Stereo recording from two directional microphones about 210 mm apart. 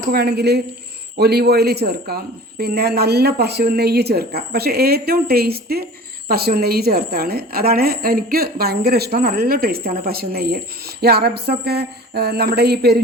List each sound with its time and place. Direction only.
0.1 s a woman's voice: 50° right (ahead or behind)